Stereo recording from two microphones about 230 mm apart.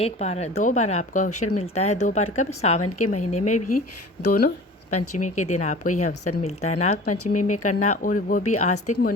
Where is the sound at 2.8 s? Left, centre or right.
Left.